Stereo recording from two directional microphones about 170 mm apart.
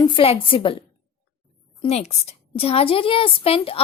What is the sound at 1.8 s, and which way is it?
Speech, 35° left (ahead or behind).